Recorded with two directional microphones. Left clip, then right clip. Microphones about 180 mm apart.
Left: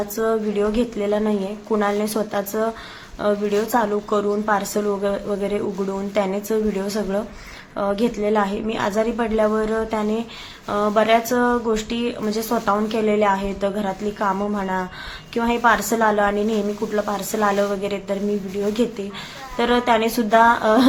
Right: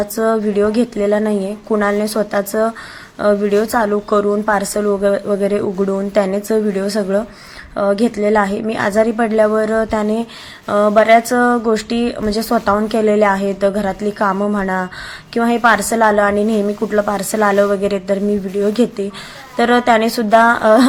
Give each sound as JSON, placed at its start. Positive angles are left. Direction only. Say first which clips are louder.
{"t": 0.2, "sound": "a woman's voice", "louder": "right 5 dB", "side_deg": -30}